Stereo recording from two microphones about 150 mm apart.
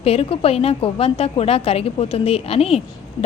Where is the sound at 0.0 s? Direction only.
40° left (ahead or behind).